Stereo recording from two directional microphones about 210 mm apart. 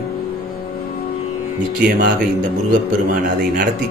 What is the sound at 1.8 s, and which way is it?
Speech, 45° right (ahead or behind).